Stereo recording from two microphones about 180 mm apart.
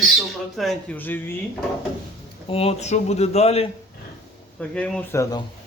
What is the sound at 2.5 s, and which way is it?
Speech, 35° left (ahead or behind).